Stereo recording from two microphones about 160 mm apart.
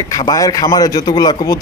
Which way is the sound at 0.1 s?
20° left (ahead or behind).